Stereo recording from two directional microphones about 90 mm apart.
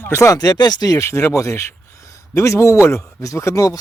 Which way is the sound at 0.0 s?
30° left (ahead or behind).